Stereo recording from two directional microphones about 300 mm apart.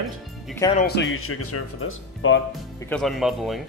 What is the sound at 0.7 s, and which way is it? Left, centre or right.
Speech, left.